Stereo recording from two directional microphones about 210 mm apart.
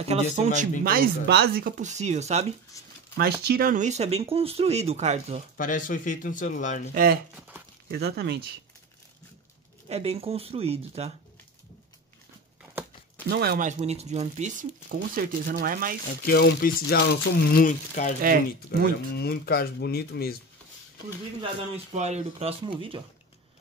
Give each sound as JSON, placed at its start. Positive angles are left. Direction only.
{"t": 0.1, "sound": "speech", "side_deg": -35}
{"t": 0.8, "sound": "speech", "side_deg": -45}
{"t": 2.8, "sound": "speech", "side_deg": 15}
{"t": 3.2, "sound": "speech", "side_deg": -45}
{"t": 5.6, "sound": "speech", "side_deg": 40}
{"t": 6.9, "sound": "speech", "side_deg": -40}
{"t": 7.3, "sound": "crumpling", "side_deg": -10}
{"t": 7.9, "sound": "speech", "side_deg": -50}
{"t": 9.8, "sound": "speech", "side_deg": -30}
{"t": 13.3, "sound": "speech", "side_deg": -50}
{"t": 13.7, "sound": "speech", "side_deg": -30}
{"t": 16.1, "sound": "speech", "side_deg": 45}
{"t": 19.1, "sound": "speech", "side_deg": 50}
{"t": 21.4, "sound": "speech", "side_deg": -30}